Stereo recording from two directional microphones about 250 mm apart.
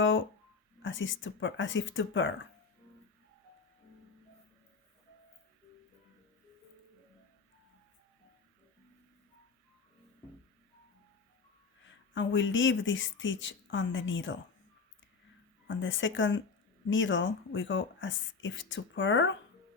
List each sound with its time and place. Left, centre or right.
0.8 s speech: left
12.1 s speech: left
15.6 s speech: left